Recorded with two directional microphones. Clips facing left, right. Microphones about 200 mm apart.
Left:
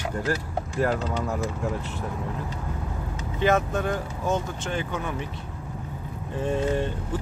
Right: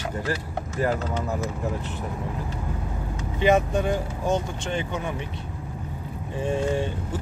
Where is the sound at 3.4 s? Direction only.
15° right (ahead or behind).